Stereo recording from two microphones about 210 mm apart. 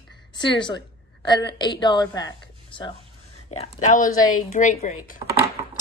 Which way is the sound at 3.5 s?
30° left (ahead or behind).